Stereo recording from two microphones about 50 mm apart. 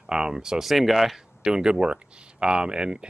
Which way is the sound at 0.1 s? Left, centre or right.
Centre.